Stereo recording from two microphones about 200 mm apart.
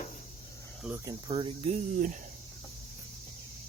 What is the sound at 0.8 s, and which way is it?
Cricket, 10° right (ahead or behind).